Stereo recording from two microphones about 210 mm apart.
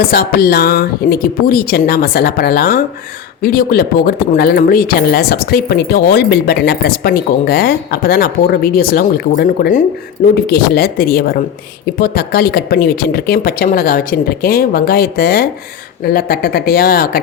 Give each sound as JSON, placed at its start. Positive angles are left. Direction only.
{"t": 0.0, "sound": "speech", "side_deg": 45}